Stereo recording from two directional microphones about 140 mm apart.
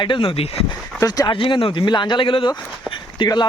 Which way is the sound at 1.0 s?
25° left (ahead or behind).